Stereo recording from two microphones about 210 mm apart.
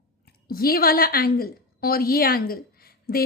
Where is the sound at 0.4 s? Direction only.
45° left (ahead or behind).